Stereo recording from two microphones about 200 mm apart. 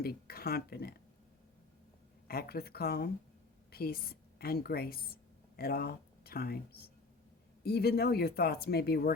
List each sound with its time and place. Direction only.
0.0 s speech: 50° left (ahead or behind)
2.2 s a woman's voice: 50° left (ahead or behind)